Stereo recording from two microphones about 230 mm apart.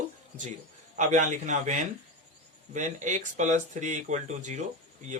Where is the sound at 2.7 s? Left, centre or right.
Right.